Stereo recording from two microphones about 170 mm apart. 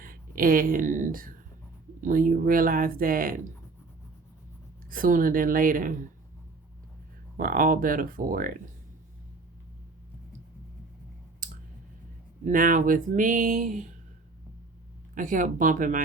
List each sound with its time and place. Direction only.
0.0 s speech: 55° right (ahead or behind)
4.9 s speech: 55° right (ahead or behind)
7.3 s speech: 55° right (ahead or behind)
11.4 s clicking: 50° right (ahead or behind)
12.5 s speech: 50° right (ahead or behind)
15.1 s speech: 50° right (ahead or behind)